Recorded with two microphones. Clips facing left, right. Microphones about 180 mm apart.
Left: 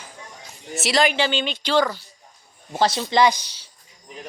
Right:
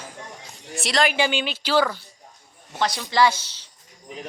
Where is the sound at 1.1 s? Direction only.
10° right (ahead or behind).